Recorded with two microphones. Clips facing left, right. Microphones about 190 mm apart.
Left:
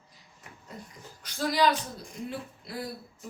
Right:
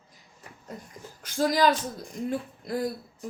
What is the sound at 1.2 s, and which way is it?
Speech, 45° right (ahead or behind).